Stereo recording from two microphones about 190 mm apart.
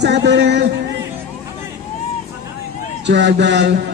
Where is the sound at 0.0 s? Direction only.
65° right (ahead or behind).